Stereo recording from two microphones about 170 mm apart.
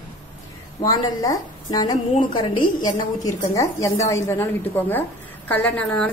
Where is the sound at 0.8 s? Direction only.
20° left (ahead or behind).